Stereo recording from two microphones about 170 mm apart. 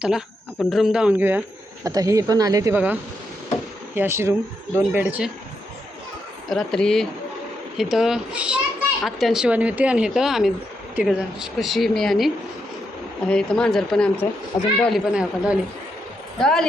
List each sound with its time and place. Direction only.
0.7 s speech: 5° right (ahead or behind)
1.8 s speech: 20° right (ahead or behind)
6.5 s speech: centre (ahead or behind)
14.5 s speech: 20° left (ahead or behind)
14.8 s speech: centre (ahead or behind)